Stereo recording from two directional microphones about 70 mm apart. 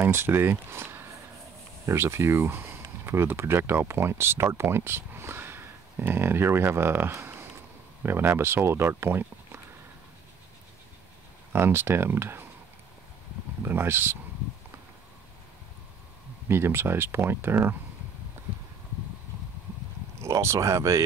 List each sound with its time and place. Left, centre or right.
0.0 s speech: right
11.5 s speech: right
13.6 s speech: right
16.4 s speech: right
20.2 s speech: right